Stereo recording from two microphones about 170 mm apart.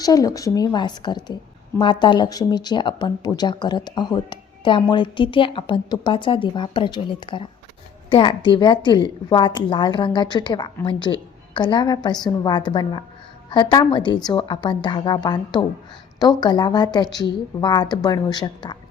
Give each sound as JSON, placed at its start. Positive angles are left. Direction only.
{"t": 0.0, "sound": "speech", "side_deg": 20}